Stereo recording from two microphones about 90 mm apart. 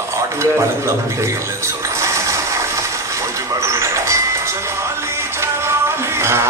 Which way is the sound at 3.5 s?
30° right (ahead or behind).